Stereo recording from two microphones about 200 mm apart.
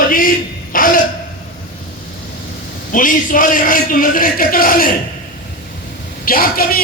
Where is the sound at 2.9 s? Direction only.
40° left (ahead or behind).